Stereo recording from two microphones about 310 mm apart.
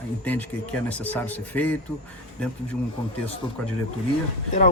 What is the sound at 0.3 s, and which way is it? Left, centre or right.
Speech, centre.